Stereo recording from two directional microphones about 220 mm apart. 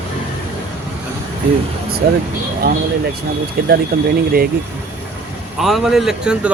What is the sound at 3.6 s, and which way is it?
Speech, 45° right (ahead or behind).